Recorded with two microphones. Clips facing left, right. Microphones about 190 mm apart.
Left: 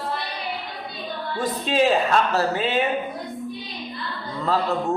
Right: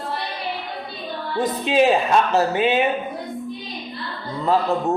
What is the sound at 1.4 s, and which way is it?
A man's voice, 15° right (ahead or behind).